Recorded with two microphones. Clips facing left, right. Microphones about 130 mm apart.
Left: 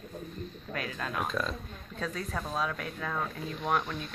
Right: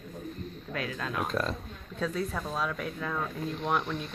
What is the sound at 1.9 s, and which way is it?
Speech, centre (ahead or behind).